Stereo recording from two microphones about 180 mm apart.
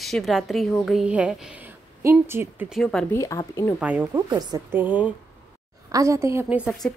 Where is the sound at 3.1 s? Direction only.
15° left (ahead or behind).